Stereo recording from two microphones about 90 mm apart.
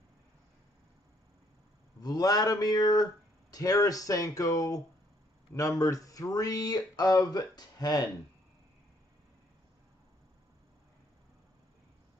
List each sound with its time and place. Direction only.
2.0 s speech: 45° left (ahead or behind)